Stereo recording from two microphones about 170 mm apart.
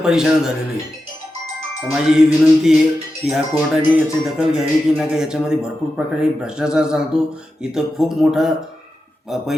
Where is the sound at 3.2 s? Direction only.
Centre (ahead or behind).